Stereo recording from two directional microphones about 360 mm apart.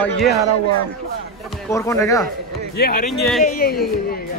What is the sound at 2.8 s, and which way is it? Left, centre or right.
Speech, left.